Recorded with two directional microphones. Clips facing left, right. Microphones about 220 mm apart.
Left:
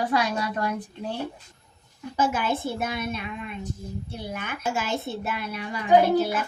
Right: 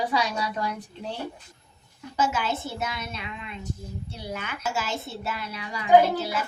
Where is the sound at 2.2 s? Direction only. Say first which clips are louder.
Left 2 dB; 55° left (ahead or behind).